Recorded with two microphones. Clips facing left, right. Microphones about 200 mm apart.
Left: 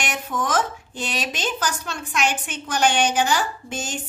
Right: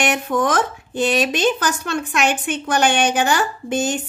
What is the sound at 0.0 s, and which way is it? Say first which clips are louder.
Speech: right 8 dB; 65° right (ahead or behind).